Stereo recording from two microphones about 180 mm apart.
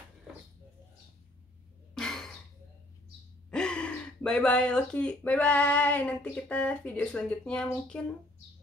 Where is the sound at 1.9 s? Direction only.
5° left (ahead or behind).